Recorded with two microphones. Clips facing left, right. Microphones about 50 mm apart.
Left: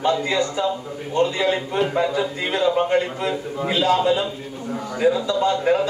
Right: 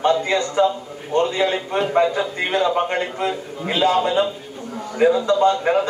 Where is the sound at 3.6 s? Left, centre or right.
Right.